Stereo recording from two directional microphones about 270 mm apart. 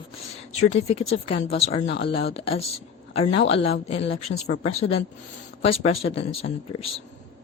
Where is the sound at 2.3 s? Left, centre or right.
Left.